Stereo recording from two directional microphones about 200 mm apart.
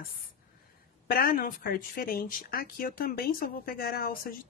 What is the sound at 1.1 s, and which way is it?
Speech, 45° left (ahead or behind).